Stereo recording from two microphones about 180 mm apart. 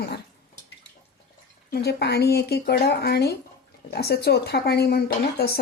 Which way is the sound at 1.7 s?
65° left (ahead or behind).